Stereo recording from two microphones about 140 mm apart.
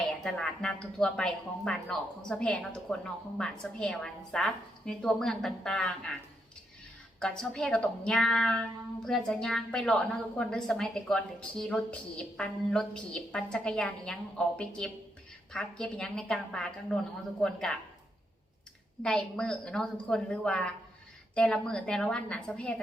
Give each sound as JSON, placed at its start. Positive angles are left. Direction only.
{"t": 0.3, "sound": "speech", "side_deg": 5}
{"t": 7.2, "sound": "speech", "side_deg": 5}
{"t": 19.0, "sound": "a woman's voice", "side_deg": 5}